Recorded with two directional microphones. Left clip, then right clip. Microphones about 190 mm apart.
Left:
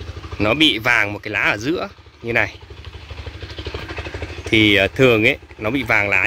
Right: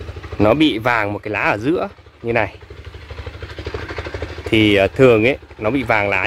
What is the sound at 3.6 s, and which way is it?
Vehicle, 5° left (ahead or behind).